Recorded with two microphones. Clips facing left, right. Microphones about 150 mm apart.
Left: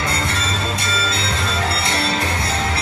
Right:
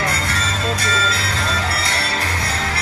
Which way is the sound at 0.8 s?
25° left (ahead or behind).